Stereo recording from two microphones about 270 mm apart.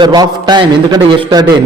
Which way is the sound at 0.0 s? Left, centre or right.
Centre.